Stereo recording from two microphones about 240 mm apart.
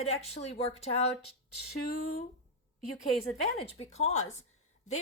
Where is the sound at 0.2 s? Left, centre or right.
Left.